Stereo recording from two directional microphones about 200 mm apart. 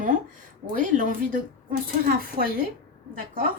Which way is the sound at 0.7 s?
40° right (ahead or behind).